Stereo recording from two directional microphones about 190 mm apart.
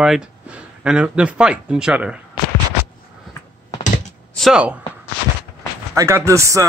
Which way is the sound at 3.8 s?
40° left (ahead or behind).